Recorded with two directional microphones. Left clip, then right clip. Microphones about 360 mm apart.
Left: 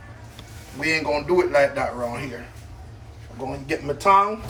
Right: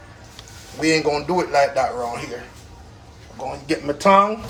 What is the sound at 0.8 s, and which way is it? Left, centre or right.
Speech, centre.